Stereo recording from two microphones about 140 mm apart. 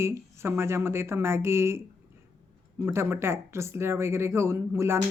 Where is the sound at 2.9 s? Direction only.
20° right (ahead or behind).